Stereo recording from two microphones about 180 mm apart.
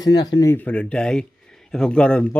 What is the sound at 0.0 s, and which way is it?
Speech, 20° left (ahead or behind).